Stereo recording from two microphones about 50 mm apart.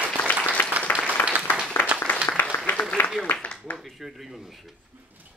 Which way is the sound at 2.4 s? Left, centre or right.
Left.